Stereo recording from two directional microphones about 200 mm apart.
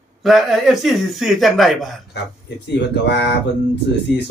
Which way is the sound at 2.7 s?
55° left (ahead or behind).